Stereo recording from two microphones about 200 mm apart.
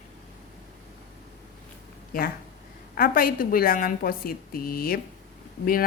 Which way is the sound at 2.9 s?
45° left (ahead or behind).